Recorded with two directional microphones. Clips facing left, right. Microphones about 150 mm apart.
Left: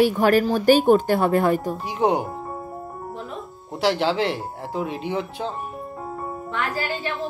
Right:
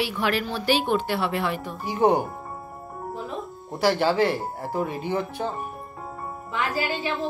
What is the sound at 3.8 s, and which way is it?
Speech, centre (ahead or behind).